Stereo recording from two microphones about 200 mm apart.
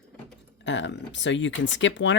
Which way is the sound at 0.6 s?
65° left (ahead or behind).